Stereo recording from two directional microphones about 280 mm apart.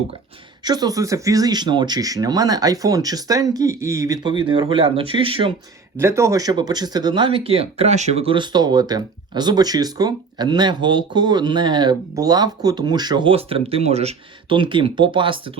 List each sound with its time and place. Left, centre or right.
0.6 s speech: centre